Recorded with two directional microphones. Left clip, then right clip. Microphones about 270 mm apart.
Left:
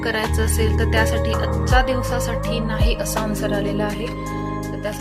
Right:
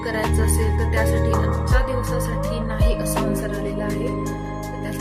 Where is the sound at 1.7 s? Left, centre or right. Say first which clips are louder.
Left 7 dB; left.